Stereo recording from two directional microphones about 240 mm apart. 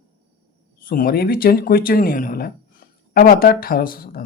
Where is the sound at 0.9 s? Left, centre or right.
Left.